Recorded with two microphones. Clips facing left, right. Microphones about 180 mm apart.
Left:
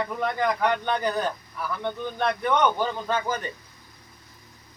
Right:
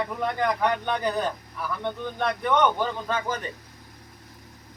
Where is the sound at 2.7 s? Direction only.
15° left (ahead or behind).